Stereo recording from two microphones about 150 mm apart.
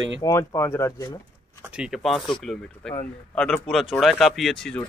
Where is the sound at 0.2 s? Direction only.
20° left (ahead or behind).